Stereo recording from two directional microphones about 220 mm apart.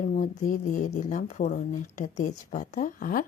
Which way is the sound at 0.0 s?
35° left (ahead or behind).